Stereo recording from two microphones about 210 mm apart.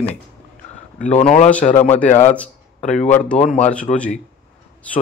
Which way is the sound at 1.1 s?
30° left (ahead or behind).